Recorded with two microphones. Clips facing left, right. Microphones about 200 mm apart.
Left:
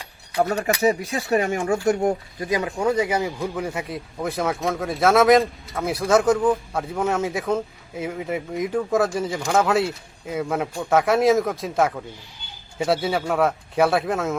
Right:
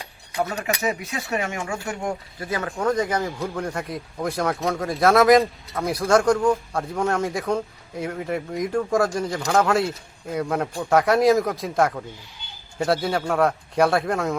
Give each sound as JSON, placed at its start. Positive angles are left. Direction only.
{"t": 0.9, "sound": "speech", "side_deg": 35}
{"t": 2.4, "sound": "speech", "side_deg": 15}